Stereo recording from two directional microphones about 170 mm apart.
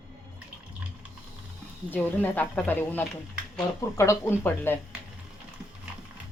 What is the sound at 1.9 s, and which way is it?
Speech, 10° left (ahead or behind).